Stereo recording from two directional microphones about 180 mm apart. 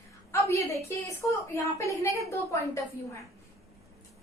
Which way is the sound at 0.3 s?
15° left (ahead or behind).